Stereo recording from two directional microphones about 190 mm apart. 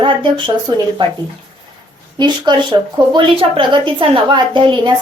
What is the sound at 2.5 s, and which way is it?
A woman's voice, 20° right (ahead or behind).